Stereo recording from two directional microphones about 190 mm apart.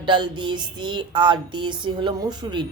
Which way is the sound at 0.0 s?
25° right (ahead or behind).